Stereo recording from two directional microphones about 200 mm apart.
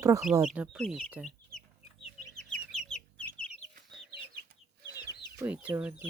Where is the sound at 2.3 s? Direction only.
5° left (ahead or behind).